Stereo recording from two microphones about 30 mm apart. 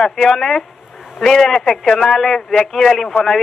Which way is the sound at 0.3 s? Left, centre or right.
Centre.